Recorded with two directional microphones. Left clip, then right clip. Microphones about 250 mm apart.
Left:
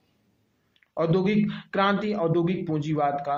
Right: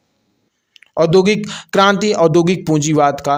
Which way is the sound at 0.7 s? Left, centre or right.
Right.